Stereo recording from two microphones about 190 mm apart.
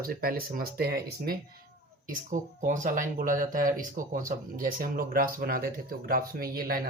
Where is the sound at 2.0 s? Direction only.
40° right (ahead or behind).